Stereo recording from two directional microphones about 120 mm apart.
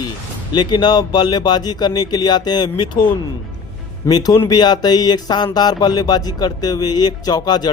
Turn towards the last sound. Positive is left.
turn(degrees=35)  # may be behind; listen again after turning